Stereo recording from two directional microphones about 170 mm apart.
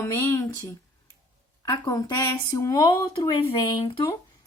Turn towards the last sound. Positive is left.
turn(degrees=20)  # may be behind; listen again after turning